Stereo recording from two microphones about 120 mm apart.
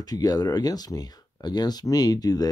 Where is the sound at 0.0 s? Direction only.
30° left (ahead or behind).